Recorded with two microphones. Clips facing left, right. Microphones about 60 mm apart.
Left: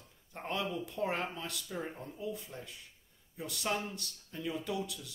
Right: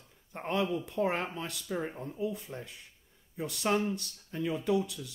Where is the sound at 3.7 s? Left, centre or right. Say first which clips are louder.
Right 7 dB; right.